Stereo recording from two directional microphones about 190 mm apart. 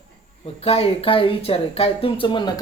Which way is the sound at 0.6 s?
30° left (ahead or behind).